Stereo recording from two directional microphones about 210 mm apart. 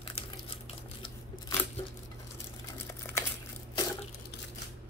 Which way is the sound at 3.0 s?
10° left (ahead or behind).